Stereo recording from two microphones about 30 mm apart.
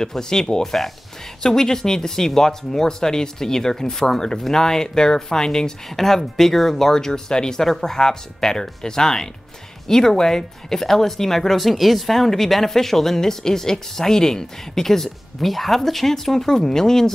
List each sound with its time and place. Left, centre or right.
0.0 s speech: left
0.7 s speech: centre
1.4 s speech: centre
5.9 s speech: centre